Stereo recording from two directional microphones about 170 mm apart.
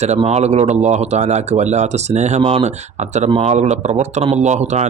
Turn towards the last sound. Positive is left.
turn(degrees=-40)  # may be behind; listen again after turning